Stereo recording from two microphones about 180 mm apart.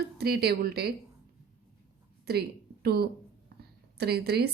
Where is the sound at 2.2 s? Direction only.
60° right (ahead or behind).